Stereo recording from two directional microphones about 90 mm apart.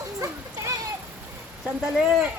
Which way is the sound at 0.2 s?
35° right (ahead or behind).